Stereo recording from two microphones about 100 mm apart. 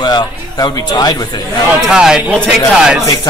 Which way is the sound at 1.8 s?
5° right (ahead or behind).